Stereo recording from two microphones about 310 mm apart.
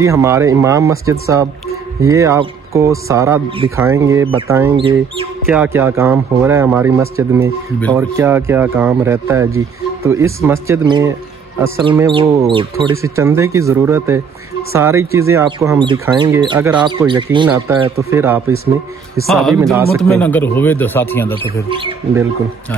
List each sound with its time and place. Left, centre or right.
0.0 s a man's voice: centre
5.5 s a man's voice: centre
21.6 s a man's voice: centre